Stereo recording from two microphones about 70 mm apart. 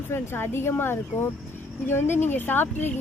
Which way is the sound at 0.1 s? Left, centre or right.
Left.